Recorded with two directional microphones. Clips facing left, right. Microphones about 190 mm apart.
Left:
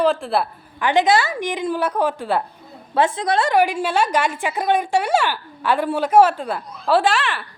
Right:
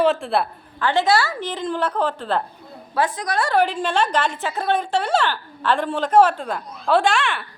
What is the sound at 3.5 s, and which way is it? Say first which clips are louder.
A woman's voice: right 2 dB; 10° left (ahead or behind).